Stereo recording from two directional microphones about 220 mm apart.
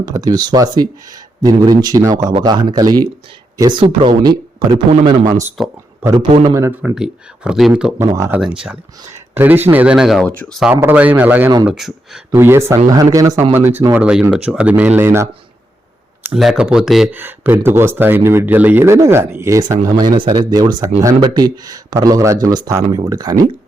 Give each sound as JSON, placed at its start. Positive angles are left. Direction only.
{"t": 0.0, "sound": "speech", "side_deg": -15}
{"t": 5.2, "sound": "speech", "side_deg": -35}
{"t": 5.5, "sound": "speech", "side_deg": -5}
{"t": 6.1, "sound": "speech", "side_deg": -20}
{"t": 16.3, "sound": "speech", "side_deg": 0}